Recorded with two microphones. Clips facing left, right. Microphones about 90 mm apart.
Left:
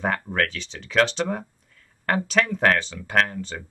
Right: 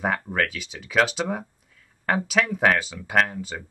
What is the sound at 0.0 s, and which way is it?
Speech, 5° right (ahead or behind).